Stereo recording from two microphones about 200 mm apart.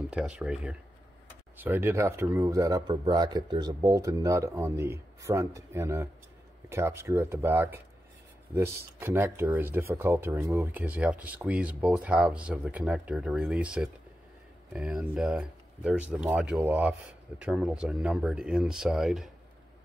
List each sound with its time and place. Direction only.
0.1 s speech: 5° right (ahead or behind)